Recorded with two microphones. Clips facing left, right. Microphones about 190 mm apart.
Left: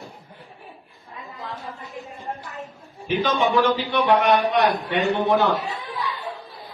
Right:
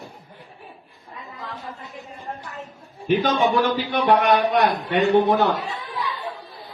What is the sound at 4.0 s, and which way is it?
Speech, 45° right (ahead or behind).